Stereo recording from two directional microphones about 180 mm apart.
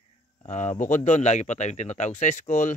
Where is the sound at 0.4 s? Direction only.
40° left (ahead or behind).